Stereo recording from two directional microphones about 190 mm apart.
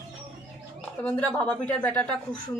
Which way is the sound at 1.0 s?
10° left (ahead or behind).